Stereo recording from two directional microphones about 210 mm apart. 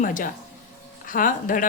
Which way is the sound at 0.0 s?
40° left (ahead or behind).